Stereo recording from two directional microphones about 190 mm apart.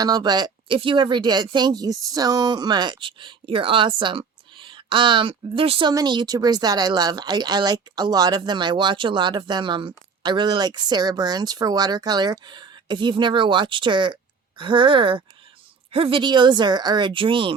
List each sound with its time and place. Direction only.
0.0 s a woman's voice: 20° right (ahead or behind)